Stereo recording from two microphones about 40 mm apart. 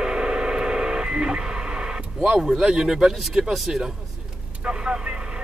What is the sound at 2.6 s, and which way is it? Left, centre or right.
Speech, centre.